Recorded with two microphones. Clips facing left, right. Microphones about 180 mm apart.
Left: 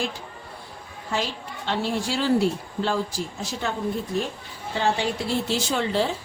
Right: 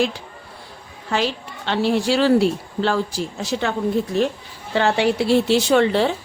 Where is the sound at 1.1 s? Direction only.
75° right (ahead or behind).